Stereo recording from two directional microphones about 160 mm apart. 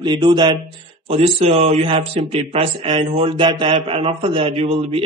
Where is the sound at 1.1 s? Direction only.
40° right (ahead or behind).